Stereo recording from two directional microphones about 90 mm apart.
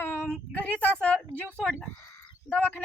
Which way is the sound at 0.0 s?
20° left (ahead or behind).